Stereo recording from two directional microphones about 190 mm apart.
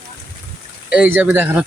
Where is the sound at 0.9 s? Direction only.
10° right (ahead or behind).